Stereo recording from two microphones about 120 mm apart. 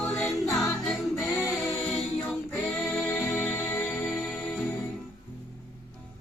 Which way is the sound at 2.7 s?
5° left (ahead or behind).